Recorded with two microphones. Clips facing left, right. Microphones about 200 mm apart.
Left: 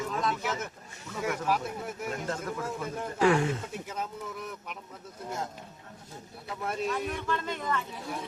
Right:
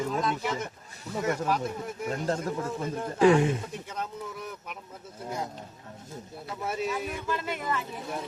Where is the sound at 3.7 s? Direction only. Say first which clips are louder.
Even; 5° left (ahead or behind).